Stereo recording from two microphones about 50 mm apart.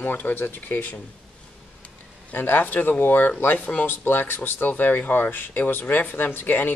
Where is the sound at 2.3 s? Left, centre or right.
Left.